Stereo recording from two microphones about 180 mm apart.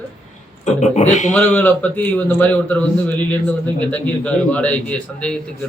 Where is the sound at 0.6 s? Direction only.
40° left (ahead or behind).